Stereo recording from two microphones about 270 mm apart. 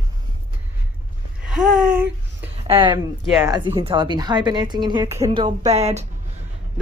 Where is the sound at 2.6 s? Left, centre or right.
Centre.